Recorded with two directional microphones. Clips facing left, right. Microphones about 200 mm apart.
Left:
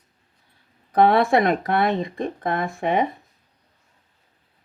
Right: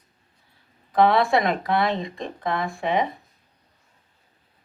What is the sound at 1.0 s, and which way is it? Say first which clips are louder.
Speech: left 2 dB; 55° left (ahead or behind).